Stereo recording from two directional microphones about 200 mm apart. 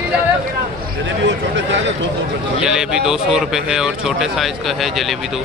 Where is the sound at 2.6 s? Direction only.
5° right (ahead or behind).